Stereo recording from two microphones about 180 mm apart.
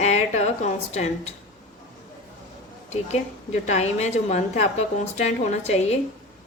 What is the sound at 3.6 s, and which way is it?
A woman's voice, 40° left (ahead or behind).